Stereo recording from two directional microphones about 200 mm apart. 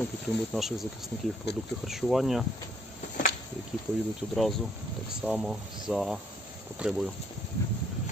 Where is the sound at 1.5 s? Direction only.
60° left (ahead or behind).